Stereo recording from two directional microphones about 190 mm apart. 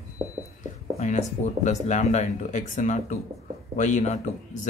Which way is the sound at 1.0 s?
40° left (ahead or behind).